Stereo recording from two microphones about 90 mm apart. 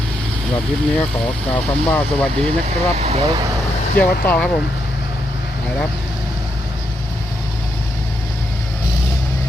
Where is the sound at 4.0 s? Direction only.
15° left (ahead or behind).